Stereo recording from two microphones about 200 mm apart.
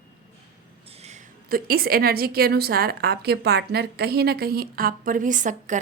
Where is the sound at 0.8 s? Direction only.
30° right (ahead or behind).